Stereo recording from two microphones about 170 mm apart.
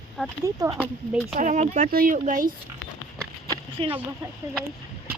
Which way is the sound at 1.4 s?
50° right (ahead or behind).